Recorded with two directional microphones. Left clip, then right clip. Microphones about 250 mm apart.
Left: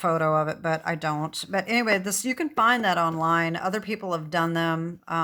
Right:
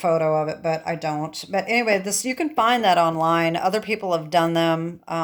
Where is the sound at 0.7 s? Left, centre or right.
Left.